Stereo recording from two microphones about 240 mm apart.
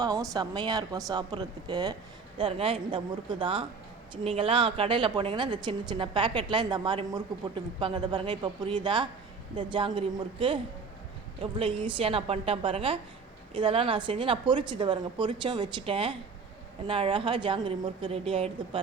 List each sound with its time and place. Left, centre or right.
0.0 s a woman's voice: centre
11.6 s a woman's voice: right